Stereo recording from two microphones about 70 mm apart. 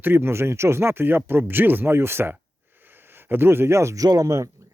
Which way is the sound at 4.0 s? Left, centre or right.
Right.